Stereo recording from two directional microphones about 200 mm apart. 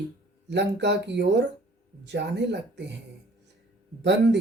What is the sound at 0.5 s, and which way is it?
Speech, 60° right (ahead or behind).